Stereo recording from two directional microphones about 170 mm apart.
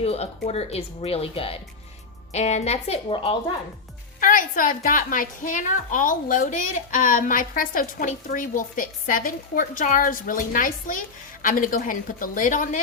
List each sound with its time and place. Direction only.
0.0 s speech: 35° left (ahead or behind)
4.2 s a woman's voice: 55° left (ahead or behind)